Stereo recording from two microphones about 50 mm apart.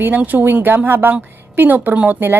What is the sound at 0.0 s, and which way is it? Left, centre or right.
A woman's voice, right.